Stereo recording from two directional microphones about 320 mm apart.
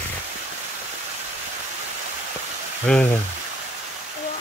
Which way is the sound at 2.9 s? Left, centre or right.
Centre.